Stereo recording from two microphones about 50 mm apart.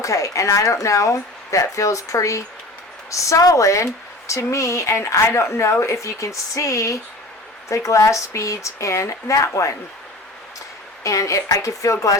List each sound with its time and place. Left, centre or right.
0.0 s a woman's voice: left
11.0 s speech: left